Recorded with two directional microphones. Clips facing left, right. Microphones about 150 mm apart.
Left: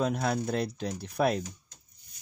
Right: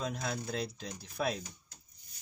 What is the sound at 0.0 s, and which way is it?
Speech, 65° left (ahead or behind).